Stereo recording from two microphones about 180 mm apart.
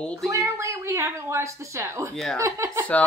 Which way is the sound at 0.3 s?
15° right (ahead or behind).